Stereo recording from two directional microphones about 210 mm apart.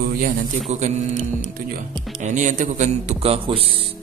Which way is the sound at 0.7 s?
35° right (ahead or behind).